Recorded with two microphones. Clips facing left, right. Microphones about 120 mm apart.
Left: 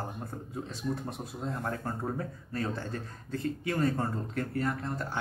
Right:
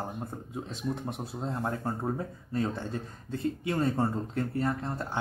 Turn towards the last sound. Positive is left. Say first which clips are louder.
# right 1 dB
turn(degrees=-25)  # may be behind; listen again after turning